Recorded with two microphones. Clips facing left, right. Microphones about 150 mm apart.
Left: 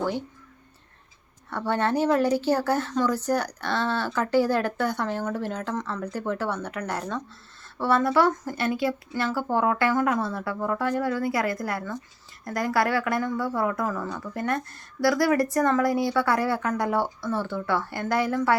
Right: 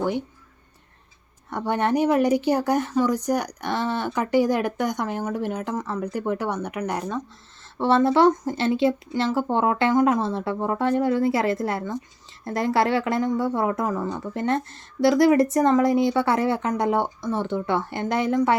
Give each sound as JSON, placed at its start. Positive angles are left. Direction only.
{"t": 1.5, "sound": "speech", "side_deg": -15}
{"t": 7.8, "sound": "speech", "side_deg": -25}